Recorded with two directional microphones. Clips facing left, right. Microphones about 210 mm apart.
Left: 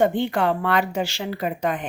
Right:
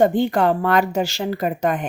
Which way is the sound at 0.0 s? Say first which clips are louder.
Right 4 dB; 40° right (ahead or behind).